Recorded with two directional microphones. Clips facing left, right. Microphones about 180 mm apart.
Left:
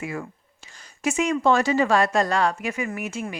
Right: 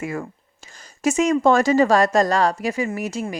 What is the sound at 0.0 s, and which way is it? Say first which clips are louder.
A woman's voice: right 3 dB; 45° right (ahead or behind).